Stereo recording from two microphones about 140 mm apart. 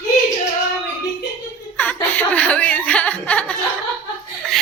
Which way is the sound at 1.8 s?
10° left (ahead or behind).